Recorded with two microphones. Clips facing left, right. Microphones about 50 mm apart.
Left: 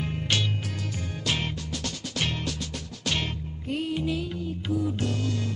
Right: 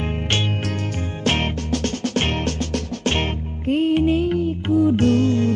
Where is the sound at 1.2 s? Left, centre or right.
Right.